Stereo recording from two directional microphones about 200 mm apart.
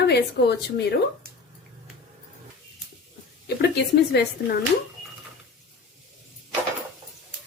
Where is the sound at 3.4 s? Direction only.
55° left (ahead or behind).